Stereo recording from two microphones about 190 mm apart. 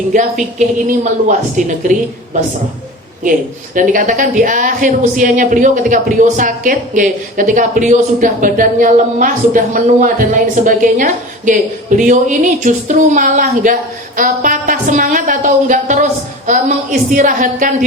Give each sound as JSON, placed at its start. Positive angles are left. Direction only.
{"t": 0.1, "sound": "a woman's voice", "side_deg": -40}
{"t": 3.8, "sound": "a woman's voice", "side_deg": -45}